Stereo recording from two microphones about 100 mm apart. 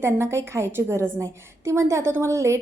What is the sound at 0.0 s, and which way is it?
Speech, 25° right (ahead or behind).